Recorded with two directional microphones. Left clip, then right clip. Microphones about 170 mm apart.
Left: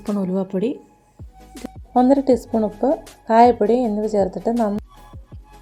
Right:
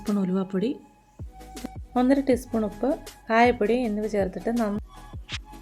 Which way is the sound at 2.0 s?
15° left (ahead or behind).